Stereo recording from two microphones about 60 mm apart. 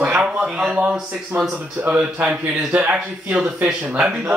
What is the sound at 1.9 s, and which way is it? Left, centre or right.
Speech, right.